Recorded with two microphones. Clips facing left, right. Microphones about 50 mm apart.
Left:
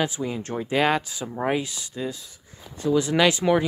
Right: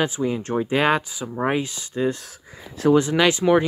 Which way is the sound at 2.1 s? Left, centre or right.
Right.